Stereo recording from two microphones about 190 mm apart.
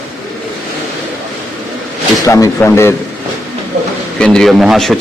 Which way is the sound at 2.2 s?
15° left (ahead or behind).